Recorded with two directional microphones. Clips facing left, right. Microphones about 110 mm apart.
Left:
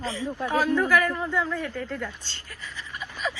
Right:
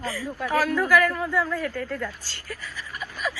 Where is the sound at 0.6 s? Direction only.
5° right (ahead or behind).